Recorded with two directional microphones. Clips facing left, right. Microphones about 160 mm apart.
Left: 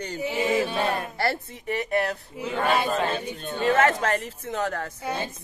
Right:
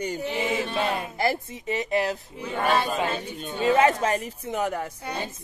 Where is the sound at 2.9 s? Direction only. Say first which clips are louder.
Left 2 dB; 15° right (ahead or behind).